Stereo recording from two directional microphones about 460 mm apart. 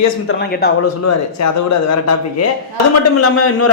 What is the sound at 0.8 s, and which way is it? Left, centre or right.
A man's voice, left.